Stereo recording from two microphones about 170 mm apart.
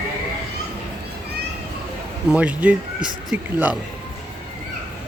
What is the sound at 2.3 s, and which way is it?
A man's voice, 5° right (ahead or behind).